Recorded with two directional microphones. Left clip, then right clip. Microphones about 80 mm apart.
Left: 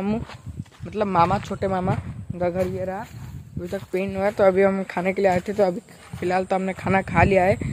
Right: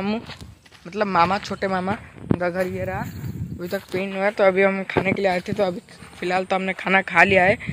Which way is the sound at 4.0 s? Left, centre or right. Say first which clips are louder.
Even; centre.